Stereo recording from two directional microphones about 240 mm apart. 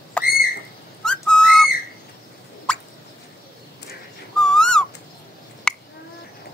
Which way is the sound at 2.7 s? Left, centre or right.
Centre.